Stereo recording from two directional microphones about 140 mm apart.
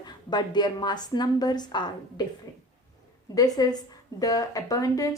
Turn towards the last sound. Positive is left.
turn(degrees=25)  # may be behind; listen again after turning